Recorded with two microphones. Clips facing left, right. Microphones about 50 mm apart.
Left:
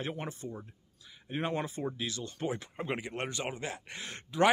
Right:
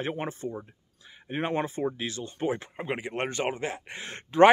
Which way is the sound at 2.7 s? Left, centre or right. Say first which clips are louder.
Right 4 dB; right.